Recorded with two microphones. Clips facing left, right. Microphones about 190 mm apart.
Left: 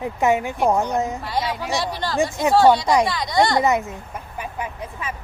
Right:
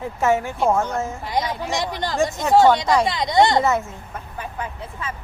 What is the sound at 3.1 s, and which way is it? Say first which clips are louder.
Speech: right 2 dB; 20° right (ahead or behind).